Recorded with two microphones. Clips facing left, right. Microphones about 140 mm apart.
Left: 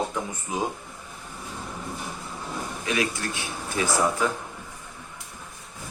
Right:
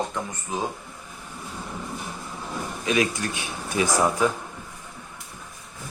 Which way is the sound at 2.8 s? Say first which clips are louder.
Right 4 dB; 20° right (ahead or behind).